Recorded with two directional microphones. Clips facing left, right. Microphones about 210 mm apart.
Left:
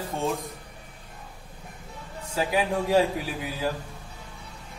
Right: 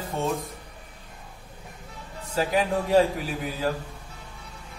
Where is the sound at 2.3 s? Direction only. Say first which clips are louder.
Right 1 dB; 10° left (ahead or behind).